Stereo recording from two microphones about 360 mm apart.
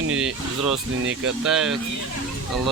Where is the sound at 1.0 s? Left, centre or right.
Right.